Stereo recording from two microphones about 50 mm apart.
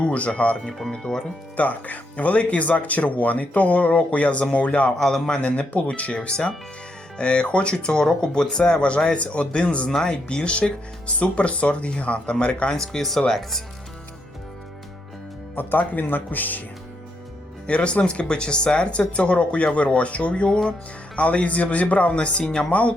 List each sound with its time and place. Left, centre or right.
0.0 s speech: left
0.8 s speech: centre
1.5 s speech: left
4.9 s speech: centre
5.4 s speech: left
12.7 s speech: centre
15.5 s speech: left
17.7 s speech: left